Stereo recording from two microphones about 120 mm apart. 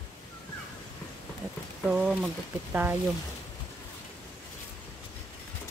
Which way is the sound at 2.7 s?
15° right (ahead or behind).